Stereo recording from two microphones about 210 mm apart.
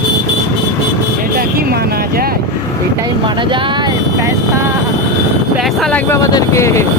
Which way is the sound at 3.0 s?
20° right (ahead or behind).